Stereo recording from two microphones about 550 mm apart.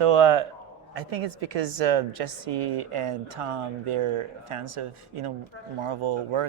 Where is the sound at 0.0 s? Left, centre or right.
Right.